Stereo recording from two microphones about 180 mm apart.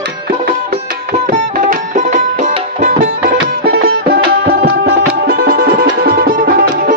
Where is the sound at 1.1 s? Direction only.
45° right (ahead or behind).